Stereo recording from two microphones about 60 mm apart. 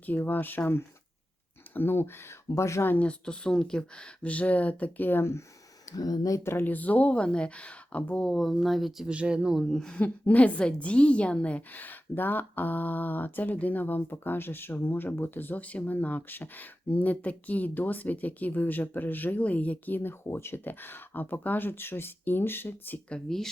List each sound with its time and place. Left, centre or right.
0.0 s a woman's voice: left
1.7 s a woman's voice: left
2.6 s speech: left
3.0 s speech: centre
5.9 s speech: left
6.4 s speech: left
6.7 s speech: left
8.3 s speech: centre
9.0 s speech: centre
9.6 s a woman's voice: centre
10.0 s a woman's voice: left